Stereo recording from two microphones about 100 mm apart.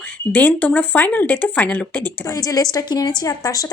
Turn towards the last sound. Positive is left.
turn(degrees=35)  # may be behind; listen again after turning